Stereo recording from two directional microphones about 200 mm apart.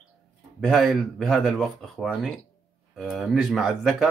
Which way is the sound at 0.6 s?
Centre (ahead or behind).